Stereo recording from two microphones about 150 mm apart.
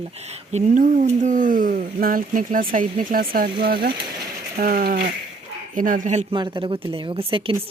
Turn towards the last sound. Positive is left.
turn(degrees=-35)  # may be behind; listen again after turning